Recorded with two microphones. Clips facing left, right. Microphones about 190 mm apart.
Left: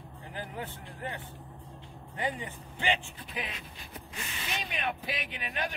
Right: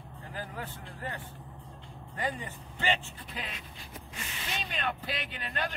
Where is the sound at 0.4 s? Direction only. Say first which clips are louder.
Left 1 dB; 20° left (ahead or behind).